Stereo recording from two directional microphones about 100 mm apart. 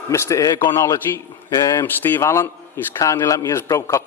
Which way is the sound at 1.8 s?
20° left (ahead or behind).